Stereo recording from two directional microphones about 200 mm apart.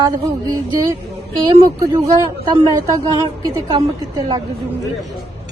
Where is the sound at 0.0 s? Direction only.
20° right (ahead or behind).